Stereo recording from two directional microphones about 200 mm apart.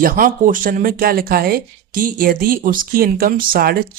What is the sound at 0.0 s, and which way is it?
Speech, 40° right (ahead or behind).